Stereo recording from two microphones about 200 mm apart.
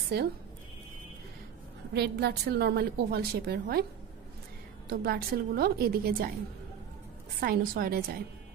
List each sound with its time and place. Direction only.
0.1 s a woman's voice: 50° right (ahead or behind)
2.0 s a woman's voice: 55° right (ahead or behind)
4.8 s a woman's voice: 50° right (ahead or behind)
7.3 s a woman's voice: 45° right (ahead or behind)